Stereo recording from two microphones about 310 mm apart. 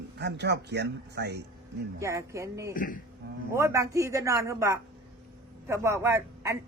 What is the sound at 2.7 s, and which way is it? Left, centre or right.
Speech, left.